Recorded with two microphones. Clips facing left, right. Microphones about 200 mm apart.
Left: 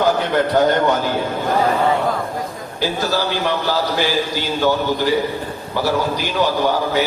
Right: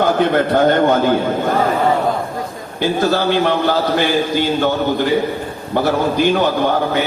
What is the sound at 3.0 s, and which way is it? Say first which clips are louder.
A man's voice: right 6 dB; 55° right (ahead or behind).